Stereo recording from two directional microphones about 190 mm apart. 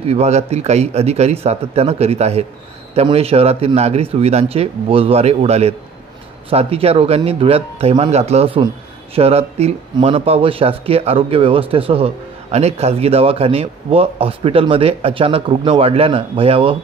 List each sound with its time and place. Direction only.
0.0 s speech: 35° right (ahead or behind)